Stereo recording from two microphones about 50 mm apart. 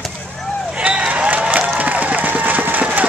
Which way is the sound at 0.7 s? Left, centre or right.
Right.